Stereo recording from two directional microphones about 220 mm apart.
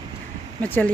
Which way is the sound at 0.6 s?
10° left (ahead or behind).